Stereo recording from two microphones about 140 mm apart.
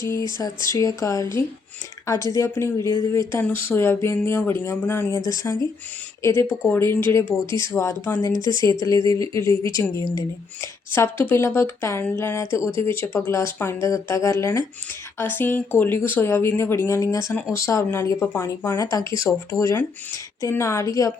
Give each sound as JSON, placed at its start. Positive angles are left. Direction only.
{"t": 0.0, "sound": "speech", "side_deg": 20}